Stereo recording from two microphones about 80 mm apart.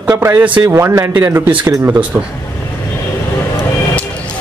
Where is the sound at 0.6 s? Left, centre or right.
Right.